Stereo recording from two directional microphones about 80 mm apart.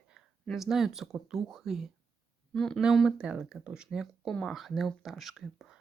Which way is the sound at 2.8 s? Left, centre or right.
Centre.